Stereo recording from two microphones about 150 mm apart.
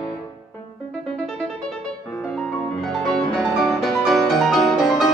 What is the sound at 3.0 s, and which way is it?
Music, 5° left (ahead or behind).